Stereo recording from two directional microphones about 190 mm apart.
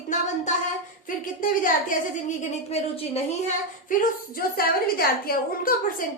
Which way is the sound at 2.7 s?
35° left (ahead or behind).